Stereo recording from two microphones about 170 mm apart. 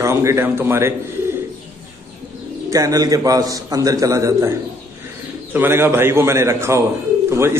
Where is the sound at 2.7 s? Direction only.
20° right (ahead or behind).